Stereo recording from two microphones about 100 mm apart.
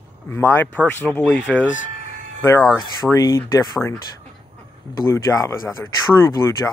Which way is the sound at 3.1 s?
30° left (ahead or behind).